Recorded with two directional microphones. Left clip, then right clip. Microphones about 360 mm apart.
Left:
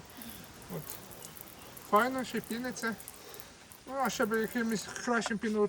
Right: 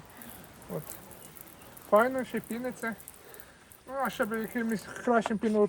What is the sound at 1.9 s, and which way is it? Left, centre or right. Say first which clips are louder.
Speech: right 4 dB; centre.